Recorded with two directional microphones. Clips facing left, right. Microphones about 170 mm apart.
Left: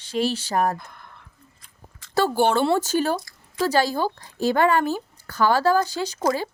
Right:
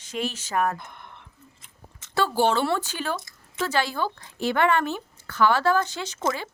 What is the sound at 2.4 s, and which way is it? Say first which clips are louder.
Speech: left 2 dB; 55° left (ahead or behind).